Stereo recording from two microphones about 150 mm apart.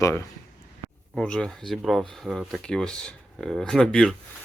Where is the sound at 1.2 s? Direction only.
5° left (ahead or behind).